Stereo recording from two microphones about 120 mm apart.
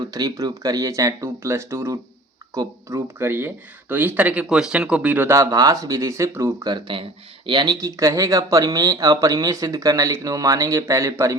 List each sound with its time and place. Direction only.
0.0 s speech: 30° right (ahead or behind)
3.2 s speech: 20° right (ahead or behind)